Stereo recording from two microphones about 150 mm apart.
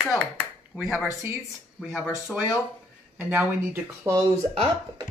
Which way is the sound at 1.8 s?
Centre (ahead or behind).